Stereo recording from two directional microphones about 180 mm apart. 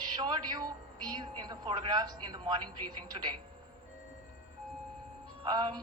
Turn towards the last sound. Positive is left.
turn(degrees=-25)  # may be behind; listen again after turning